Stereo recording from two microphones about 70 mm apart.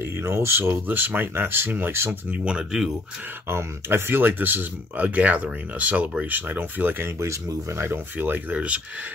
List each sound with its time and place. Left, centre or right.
0.0 s speech: right
2.3 s speech: centre
3.4 s speech: right
7.2 s speech: right
7.8 s speech: right